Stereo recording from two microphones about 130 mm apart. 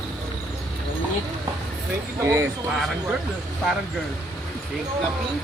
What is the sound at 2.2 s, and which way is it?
Speech, 25° right (ahead or behind).